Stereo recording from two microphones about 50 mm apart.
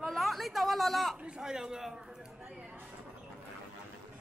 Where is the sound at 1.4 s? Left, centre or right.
Centre.